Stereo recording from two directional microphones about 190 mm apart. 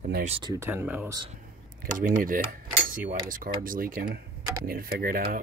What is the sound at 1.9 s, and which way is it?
Cutlery, 45° right (ahead or behind).